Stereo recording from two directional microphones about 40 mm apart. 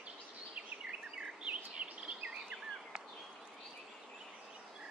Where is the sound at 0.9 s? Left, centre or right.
Right.